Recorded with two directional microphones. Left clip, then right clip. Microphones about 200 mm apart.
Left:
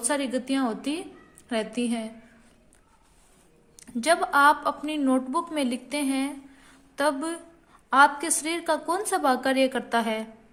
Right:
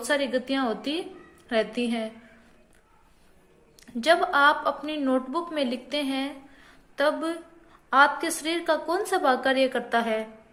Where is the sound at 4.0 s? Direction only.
25° left (ahead or behind).